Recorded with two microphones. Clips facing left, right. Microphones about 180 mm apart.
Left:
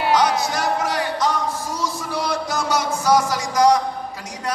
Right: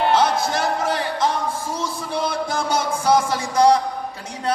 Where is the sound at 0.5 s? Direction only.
25° right (ahead or behind).